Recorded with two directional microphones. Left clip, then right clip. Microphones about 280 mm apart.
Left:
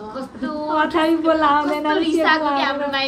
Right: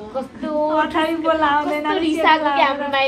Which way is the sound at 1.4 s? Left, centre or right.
Left.